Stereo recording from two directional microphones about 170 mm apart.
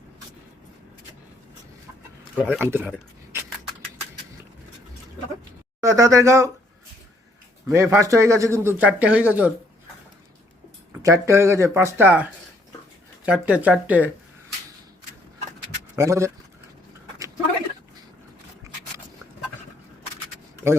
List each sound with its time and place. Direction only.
2.3 s speech: 5° right (ahead or behind)
5.8 s speech: 20° right (ahead or behind)
7.7 s speech: 15° right (ahead or behind)
10.9 s speech: 15° right (ahead or behind)
16.0 s speech: 15° right (ahead or behind)